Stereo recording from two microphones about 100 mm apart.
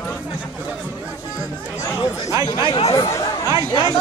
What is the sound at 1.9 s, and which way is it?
Speech, 30° left (ahead or behind).